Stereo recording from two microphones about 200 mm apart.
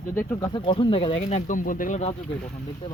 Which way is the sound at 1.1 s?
40° left (ahead or behind).